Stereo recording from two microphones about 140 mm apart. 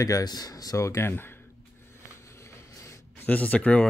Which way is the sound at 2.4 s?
20° left (ahead or behind).